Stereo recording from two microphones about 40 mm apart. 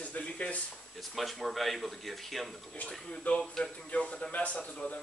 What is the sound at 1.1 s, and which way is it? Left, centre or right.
Speech, centre.